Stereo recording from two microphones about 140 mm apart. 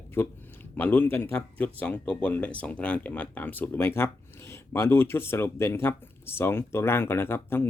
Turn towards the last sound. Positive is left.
turn(degrees=15)  # may be behind; listen again after turning